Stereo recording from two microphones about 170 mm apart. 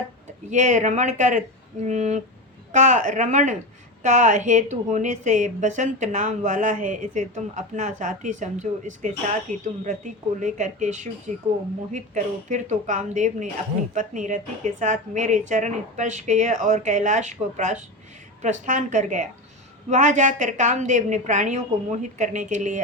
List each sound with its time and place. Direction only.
0.5 s a woman's voice: 45° right (ahead or behind)